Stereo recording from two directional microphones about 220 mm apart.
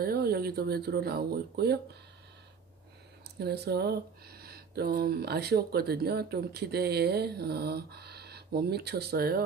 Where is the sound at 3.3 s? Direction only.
50° right (ahead or behind).